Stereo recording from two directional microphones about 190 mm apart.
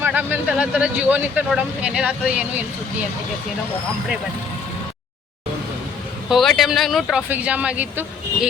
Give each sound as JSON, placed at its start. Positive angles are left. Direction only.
{"t": 0.0, "sound": "speech", "side_deg": -10}
{"t": 6.2, "sound": "speech", "side_deg": 0}